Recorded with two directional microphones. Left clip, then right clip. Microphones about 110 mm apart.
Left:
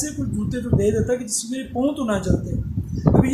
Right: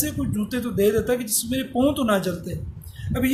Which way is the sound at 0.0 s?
20° right (ahead or behind).